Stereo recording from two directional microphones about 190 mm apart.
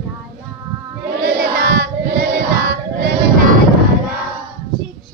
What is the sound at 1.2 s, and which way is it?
Crowd, 50° right (ahead or behind).